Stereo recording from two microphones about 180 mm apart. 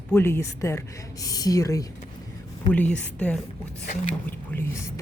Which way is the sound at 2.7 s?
5° left (ahead or behind).